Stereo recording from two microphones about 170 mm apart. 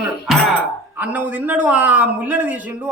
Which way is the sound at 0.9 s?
10° right (ahead or behind).